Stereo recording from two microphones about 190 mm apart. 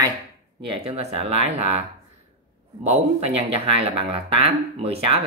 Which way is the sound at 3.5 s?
30° right (ahead or behind).